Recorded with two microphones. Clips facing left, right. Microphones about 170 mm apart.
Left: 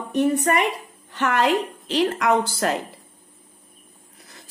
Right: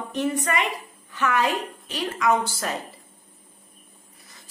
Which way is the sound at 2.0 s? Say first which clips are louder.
Left 1 dB; 60° left (ahead or behind).